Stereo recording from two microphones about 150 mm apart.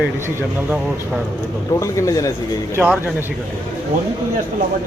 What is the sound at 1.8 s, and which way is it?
Speech, 20° left (ahead or behind).